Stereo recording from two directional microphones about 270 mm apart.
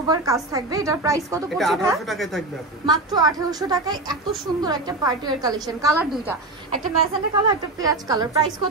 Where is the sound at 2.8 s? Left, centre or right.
Centre.